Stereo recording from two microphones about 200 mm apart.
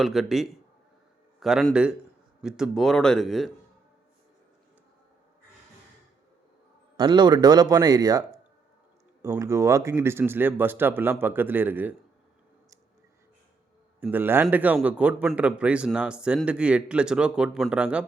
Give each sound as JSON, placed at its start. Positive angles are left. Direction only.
{"t": 0.0, "sound": "a man's voice", "side_deg": 0}
{"t": 6.9, "sound": "a man's voice", "side_deg": -20}
{"t": 14.0, "sound": "a man's voice", "side_deg": -10}